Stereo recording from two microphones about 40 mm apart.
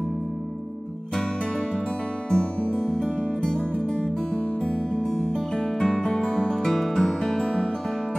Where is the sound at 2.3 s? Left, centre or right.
Left.